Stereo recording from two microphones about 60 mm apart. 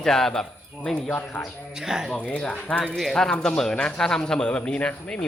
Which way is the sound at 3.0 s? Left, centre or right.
Centre.